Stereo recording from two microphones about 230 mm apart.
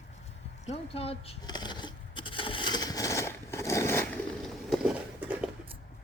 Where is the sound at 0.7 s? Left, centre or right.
Left; by 5.5 s centre.